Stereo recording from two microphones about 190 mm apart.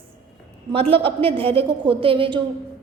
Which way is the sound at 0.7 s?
30° right (ahead or behind).